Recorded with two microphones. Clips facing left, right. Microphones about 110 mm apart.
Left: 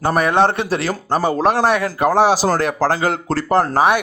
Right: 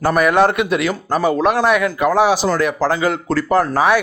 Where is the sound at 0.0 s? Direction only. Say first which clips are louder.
Right 1 dB; 30° left (ahead or behind).